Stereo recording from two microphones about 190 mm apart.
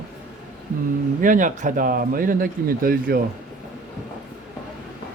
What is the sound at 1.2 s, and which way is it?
Speech, 45° right (ahead or behind).